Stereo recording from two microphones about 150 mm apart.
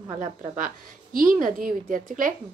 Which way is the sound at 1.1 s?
65° right (ahead or behind).